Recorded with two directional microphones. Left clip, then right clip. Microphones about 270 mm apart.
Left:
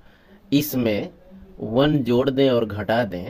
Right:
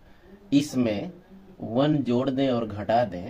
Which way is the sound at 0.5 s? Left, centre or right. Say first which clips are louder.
Left 3 dB; left.